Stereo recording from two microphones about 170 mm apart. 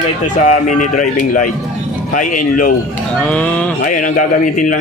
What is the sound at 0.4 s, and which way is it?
A man's voice, 45° left (ahead or behind).